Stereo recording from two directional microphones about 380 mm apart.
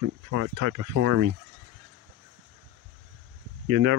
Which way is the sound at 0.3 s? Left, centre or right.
Right.